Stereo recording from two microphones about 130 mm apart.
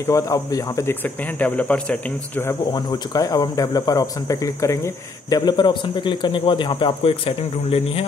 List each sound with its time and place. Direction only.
0.0 s speech: 25° left (ahead or behind)
1.0 s speech: 10° left (ahead or behind)
2.7 s speech: 30° left (ahead or behind); by 8.0 s 50° left (ahead or behind)